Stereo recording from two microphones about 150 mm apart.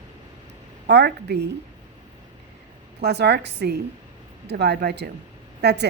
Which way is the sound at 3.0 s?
90° right.